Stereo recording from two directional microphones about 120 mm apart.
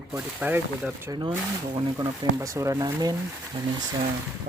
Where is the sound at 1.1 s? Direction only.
30° right (ahead or behind).